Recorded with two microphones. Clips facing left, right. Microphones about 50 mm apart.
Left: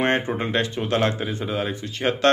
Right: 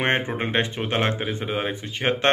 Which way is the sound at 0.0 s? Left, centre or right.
Right.